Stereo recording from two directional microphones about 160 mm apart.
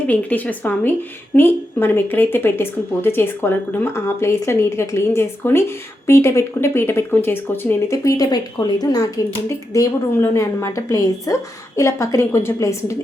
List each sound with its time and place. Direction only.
0.1 s a woman's voice: 10° left (ahead or behind)